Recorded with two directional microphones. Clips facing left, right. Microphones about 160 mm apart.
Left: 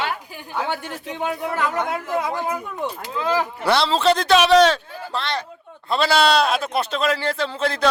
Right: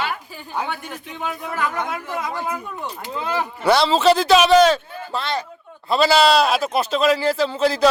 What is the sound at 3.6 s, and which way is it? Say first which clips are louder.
Speech: right 3 dB; centre (ahead or behind).